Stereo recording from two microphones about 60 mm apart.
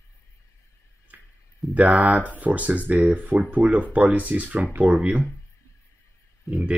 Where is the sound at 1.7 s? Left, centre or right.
Right.